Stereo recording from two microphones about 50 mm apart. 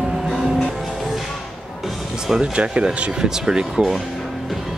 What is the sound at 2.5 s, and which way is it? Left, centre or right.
Speech, right.